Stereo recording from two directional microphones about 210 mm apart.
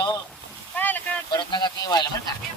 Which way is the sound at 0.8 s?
10° left (ahead or behind).